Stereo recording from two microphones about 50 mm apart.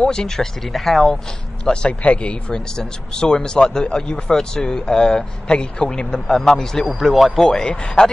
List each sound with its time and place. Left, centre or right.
0.0 s speech: centre
1.6 s speech: centre
6.9 s speech: centre
7.3 s speech: centre